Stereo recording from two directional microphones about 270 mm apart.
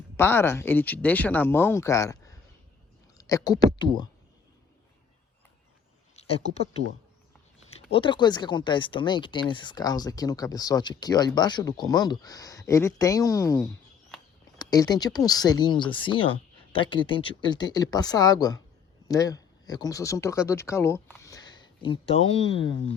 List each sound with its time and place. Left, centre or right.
0.2 s speech: centre
6.1 s speech: left
7.9 s speech: centre